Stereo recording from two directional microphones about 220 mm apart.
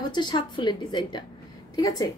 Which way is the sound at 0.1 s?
20° left (ahead or behind).